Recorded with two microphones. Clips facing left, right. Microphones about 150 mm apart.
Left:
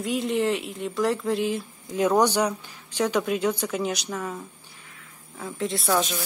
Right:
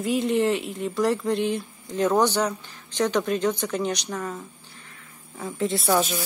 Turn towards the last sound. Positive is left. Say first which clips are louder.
# right 2 dB
turn(degrees=-5)  # may be behind; listen again after turning